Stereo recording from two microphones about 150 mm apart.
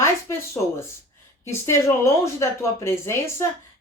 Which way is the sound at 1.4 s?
20° left (ahead or behind).